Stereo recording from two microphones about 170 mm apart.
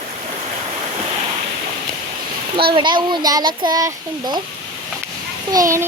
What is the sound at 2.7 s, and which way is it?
Speech, 25° right (ahead or behind).